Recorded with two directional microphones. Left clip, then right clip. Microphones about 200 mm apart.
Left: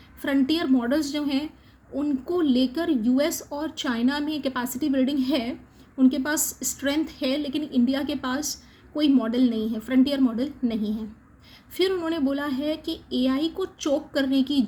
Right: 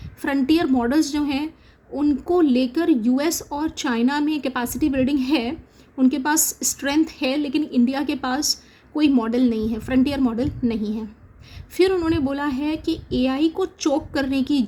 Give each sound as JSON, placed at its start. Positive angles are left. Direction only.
{"t": 0.2, "sound": "speech", "side_deg": -30}
{"t": 13.8, "sound": "speech", "side_deg": -30}